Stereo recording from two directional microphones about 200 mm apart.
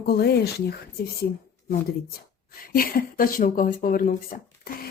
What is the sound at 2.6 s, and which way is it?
Speech, 45° left (ahead or behind).